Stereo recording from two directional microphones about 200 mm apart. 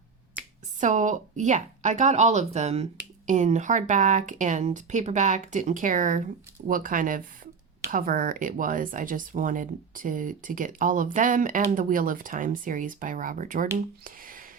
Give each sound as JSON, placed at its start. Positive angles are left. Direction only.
{"t": 0.8, "sound": "speech", "side_deg": -35}